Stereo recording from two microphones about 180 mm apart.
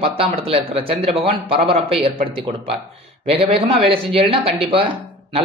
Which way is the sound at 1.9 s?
Centre (ahead or behind).